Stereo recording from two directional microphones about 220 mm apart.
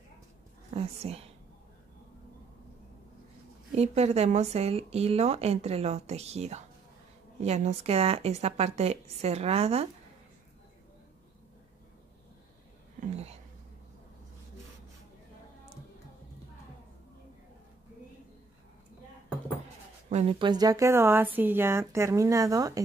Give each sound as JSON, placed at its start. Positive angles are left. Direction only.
{"t": 0.7, "sound": "speech", "side_deg": -30}
{"t": 3.7, "sound": "speech", "side_deg": -30}
{"t": 20.1, "sound": "speech", "side_deg": -30}